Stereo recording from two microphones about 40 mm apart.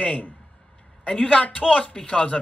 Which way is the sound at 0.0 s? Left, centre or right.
Left.